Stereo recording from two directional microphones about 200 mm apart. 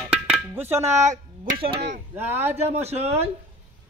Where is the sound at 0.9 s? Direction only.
35° right (ahead or behind).